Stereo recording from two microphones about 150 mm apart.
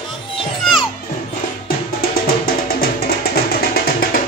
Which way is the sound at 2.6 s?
90° left.